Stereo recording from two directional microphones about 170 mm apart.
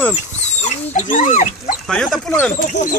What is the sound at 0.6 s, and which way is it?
Speech, 45° left (ahead or behind).